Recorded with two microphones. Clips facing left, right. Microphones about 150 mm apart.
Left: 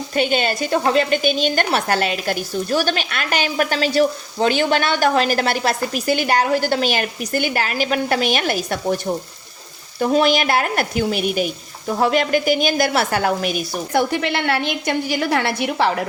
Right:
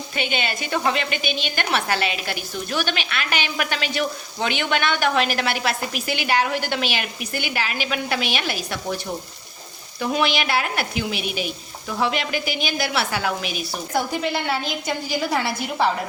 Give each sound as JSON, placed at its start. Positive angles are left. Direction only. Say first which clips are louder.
{"t": 0.1, "sound": "a woman's voice", "louder": "left 7 dB", "side_deg": 40}
{"t": 10.0, "sound": "speech", "louder": "left 6 dB", "side_deg": 40}
{"t": 13.9, "sound": "a woman's voice", "louder": "left 4 dB", "side_deg": 70}